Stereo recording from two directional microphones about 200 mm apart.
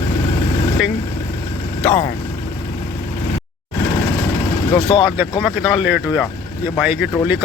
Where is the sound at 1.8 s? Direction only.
15° left (ahead or behind).